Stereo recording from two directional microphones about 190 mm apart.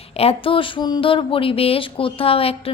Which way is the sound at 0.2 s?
30° left (ahead or behind).